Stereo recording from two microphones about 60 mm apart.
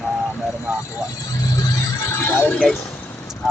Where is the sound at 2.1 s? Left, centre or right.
Left.